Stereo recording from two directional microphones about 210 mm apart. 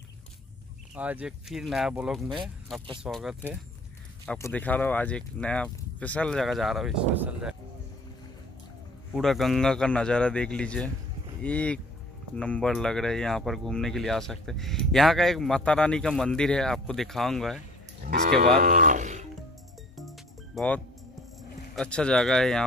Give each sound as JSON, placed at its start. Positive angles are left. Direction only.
{"t": 0.9, "sound": "speech", "side_deg": -5}
{"t": 9.1, "sound": "speech", "side_deg": 0}
{"t": 18.0, "sound": "moo", "side_deg": -55}
{"t": 18.6, "sound": "speech", "side_deg": -40}
{"t": 20.0, "sound": "music", "side_deg": 0}
{"t": 21.7, "sound": "speech", "side_deg": 5}